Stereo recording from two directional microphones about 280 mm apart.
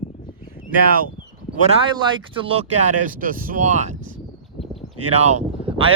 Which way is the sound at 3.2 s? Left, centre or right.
Right.